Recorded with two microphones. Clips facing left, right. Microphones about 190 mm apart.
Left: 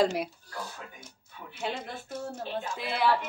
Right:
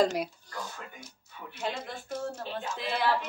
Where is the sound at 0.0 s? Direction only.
Centre (ahead or behind).